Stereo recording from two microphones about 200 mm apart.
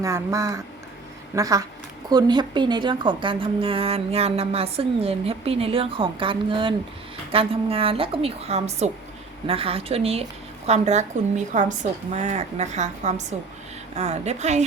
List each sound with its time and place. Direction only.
0.0 s a woman's voice: 15° right (ahead or behind); by 14.6 s 35° right (ahead or behind)